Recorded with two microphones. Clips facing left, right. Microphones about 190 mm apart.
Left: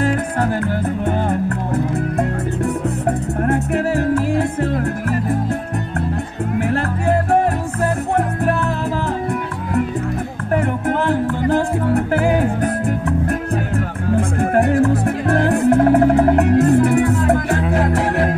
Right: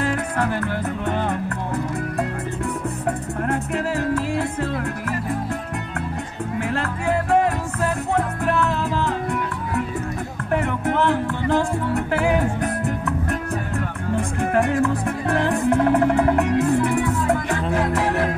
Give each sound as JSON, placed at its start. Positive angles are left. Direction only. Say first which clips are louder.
{"t": 0.0, "sound": "music", "louder": "left 4 dB", "side_deg": 45}
{"t": 2.1, "sound": "music", "louder": "left 5 dB", "side_deg": 35}
{"t": 3.7, "sound": "music", "louder": "left 4 dB", "side_deg": 55}
{"t": 10.6, "sound": "music", "louder": "left 1 dB", "side_deg": 40}